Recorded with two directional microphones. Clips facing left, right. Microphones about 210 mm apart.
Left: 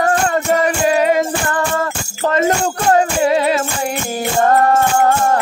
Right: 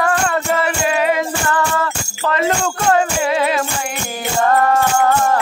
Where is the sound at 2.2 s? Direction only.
45° left (ahead or behind).